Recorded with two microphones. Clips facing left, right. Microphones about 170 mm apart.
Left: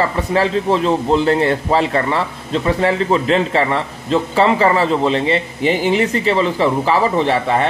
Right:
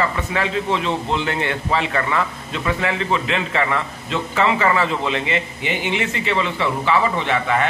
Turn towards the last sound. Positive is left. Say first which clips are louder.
# left 4 dB
turn(degrees=35)  # may be behind; listen again after turning